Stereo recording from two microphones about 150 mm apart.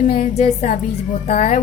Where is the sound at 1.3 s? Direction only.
65° left (ahead or behind).